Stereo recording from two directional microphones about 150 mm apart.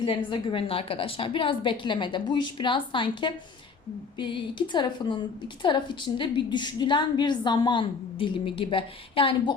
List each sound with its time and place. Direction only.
0.0 s a woman's voice: 35° left (ahead or behind)